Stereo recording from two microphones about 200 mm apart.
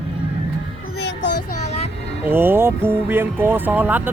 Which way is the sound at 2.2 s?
10° right (ahead or behind).